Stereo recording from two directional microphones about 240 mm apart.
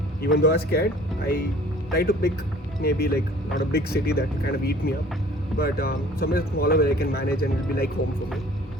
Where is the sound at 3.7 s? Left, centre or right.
Left.